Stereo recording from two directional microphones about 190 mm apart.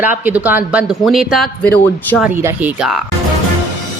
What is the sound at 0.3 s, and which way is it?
A man's voice, 10° right (ahead or behind).